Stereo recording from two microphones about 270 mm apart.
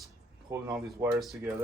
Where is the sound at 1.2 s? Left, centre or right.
Centre.